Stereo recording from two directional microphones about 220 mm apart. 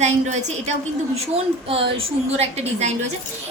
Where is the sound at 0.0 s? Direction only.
30° right (ahead or behind).